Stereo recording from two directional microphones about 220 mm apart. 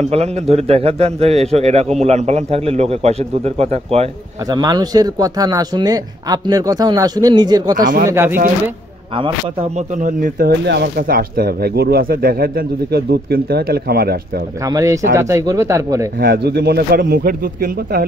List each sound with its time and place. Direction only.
0.0 s a man's voice: 30° right (ahead or behind)
7.8 s speech: 40° right (ahead or behind)
8.1 s speech: 10° right (ahead or behind)
9.1 s a man's voice: 25° right (ahead or behind)
10.0 s speech: 35° right (ahead or behind)
14.7 s speech: 15° right (ahead or behind)
16.2 s speech: 45° right (ahead or behind)